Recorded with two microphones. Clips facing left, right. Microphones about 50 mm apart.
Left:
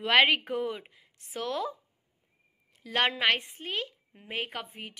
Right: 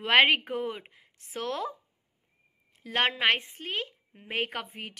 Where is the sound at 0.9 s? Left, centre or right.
Right.